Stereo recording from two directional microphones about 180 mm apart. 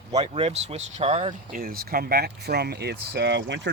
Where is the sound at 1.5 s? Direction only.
55° right (ahead or behind).